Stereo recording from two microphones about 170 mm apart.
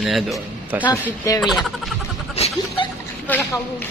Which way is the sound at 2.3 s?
35° left (ahead or behind).